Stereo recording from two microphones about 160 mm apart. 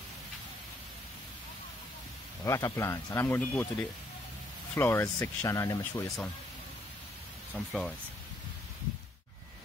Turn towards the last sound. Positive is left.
turn(degrees=5)  # may be behind; listen again after turning